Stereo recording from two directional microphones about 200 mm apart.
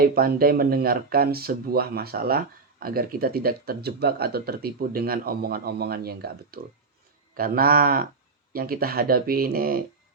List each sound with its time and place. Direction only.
0.0 s speech: 50° right (ahead or behind)